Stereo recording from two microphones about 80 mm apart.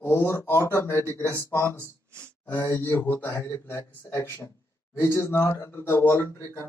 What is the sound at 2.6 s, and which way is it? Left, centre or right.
Speech, left.